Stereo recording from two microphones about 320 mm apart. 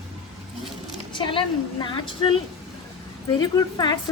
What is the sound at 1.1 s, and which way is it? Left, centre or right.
A woman's voice, centre.